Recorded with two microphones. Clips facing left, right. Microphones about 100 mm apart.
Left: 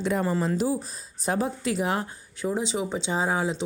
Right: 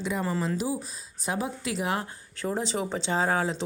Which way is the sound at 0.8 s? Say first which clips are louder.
Left 4 dB; 40° left (ahead or behind).